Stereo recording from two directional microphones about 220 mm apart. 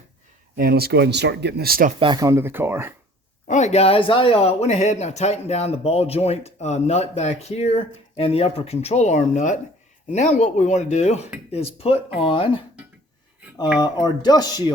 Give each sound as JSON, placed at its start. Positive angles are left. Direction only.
{"t": 0.5, "sound": "speech", "side_deg": -45}
{"t": 2.0, "sound": "speech", "side_deg": -20}
{"t": 3.4, "sound": "speech", "side_deg": 35}
{"t": 13.7, "sound": "speech", "side_deg": 20}